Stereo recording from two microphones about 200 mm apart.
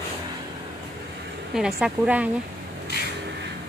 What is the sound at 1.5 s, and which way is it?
Speech, 5° right (ahead or behind).